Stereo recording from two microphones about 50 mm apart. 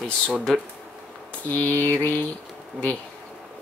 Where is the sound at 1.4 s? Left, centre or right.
Left.